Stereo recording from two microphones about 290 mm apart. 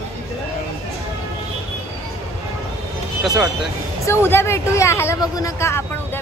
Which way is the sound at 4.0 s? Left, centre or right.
Centre.